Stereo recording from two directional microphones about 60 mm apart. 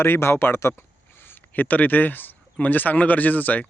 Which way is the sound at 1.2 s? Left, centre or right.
Left.